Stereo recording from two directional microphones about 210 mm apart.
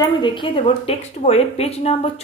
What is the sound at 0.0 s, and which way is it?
A woman's voice, 25° left (ahead or behind).